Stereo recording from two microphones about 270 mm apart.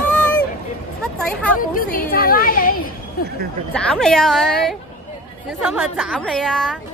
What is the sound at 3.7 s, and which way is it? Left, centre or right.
A woman's voice, centre.